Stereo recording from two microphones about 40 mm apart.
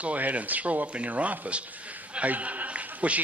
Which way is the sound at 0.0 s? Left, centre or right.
Right.